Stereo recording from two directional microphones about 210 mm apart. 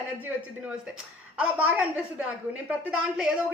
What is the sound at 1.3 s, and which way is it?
A woman's voice, 5° right (ahead or behind).